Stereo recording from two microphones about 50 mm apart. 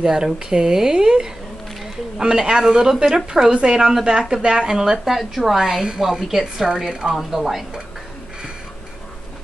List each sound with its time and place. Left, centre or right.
0.0 s a woman's voice: centre